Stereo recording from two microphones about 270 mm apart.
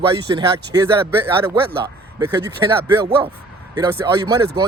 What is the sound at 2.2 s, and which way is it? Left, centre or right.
Speech, centre.